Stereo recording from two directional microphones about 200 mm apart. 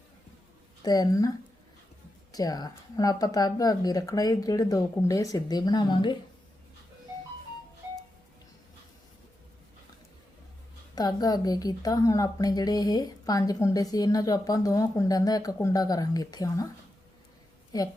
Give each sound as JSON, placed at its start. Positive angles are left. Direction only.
{"t": 0.8, "sound": "speech", "side_deg": 20}
{"t": 2.3, "sound": "speech", "side_deg": 20}
{"t": 10.9, "sound": "a woman's voice", "side_deg": 20}